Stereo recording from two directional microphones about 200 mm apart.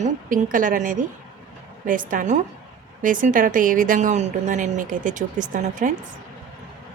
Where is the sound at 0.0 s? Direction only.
40° right (ahead or behind).